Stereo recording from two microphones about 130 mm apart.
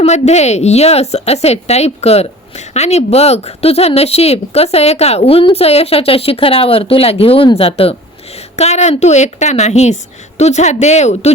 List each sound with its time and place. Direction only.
0.0 s speech: 60° left (ahead or behind)